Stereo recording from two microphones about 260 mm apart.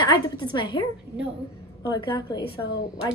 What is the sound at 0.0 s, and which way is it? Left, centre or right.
A woman's voice, centre.